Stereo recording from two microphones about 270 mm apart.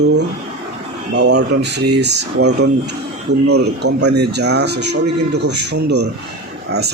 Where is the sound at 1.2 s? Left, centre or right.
Right.